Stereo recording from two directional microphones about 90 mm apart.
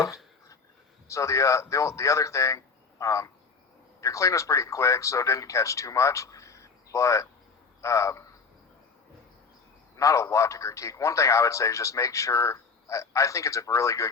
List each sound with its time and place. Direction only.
1.0 s a man's voice: 35° left (ahead or behind)
10.0 s a man's voice: 35° left (ahead or behind)